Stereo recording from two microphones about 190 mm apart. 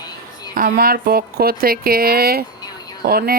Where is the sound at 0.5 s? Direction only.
50° right (ahead or behind).